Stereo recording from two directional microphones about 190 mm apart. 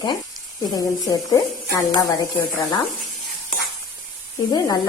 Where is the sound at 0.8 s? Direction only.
20° left (ahead or behind).